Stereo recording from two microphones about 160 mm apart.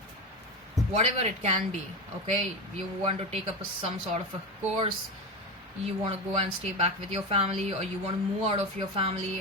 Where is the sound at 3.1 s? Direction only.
35° right (ahead or behind).